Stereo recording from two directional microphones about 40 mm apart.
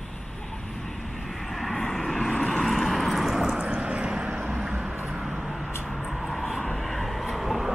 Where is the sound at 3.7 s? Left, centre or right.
Right.